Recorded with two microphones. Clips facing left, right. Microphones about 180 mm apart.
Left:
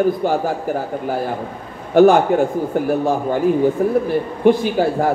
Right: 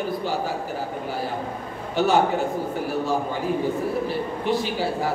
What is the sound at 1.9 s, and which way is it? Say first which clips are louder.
Speech: left 10 dB; 55° left (ahead or behind).